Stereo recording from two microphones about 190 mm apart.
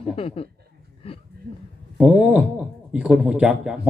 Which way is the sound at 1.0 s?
30° left (ahead or behind).